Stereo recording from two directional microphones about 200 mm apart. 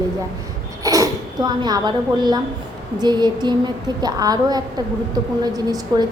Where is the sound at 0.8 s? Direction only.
15° right (ahead or behind).